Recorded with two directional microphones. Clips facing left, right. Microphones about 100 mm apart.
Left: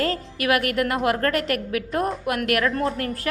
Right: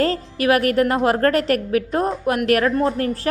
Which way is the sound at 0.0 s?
30° right (ahead or behind).